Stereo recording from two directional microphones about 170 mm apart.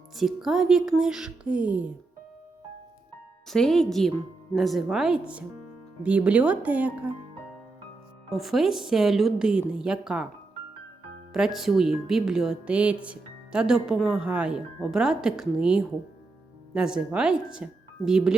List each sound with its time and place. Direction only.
0.2 s speech: centre (ahead or behind)
3.5 s speech: centre (ahead or behind)
8.3 s speech: centre (ahead or behind)
11.3 s speech: centre (ahead or behind)